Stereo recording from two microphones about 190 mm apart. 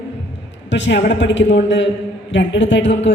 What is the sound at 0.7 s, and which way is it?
A man's voice, 70° left (ahead or behind).